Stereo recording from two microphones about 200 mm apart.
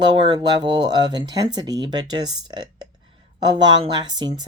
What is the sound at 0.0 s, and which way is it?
Speech, 20° right (ahead or behind).